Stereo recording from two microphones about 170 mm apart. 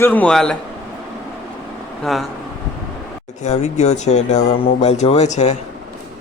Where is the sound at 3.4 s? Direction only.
40° left (ahead or behind).